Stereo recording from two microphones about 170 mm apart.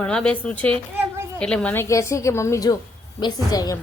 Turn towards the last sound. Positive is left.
turn(degrees=20)  # may be behind; listen again after turning